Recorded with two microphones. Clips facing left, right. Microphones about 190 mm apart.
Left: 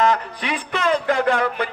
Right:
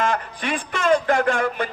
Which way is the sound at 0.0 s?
50° right (ahead or behind).